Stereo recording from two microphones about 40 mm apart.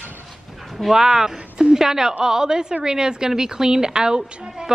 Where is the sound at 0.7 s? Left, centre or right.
Centre.